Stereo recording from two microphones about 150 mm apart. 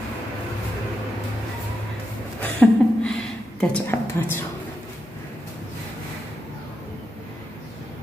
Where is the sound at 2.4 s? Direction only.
10° left (ahead or behind).